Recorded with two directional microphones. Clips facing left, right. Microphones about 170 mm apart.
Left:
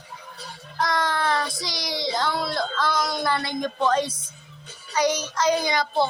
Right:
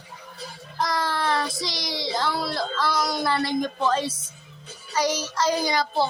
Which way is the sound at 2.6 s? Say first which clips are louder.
Even; 5° right (ahead or behind).